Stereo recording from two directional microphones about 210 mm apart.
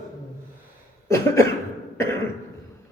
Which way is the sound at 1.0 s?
15° left (ahead or behind).